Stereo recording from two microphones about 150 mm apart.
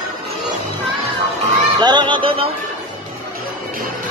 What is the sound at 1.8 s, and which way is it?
Speech, 30° right (ahead or behind).